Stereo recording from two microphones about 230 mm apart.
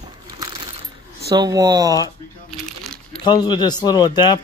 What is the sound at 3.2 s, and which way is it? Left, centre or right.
Speech, centre.